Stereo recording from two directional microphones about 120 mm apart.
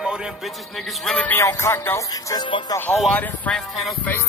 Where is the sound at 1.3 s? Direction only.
25° left (ahead or behind).